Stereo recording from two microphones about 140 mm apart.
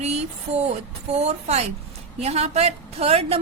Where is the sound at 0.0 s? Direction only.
50° right (ahead or behind).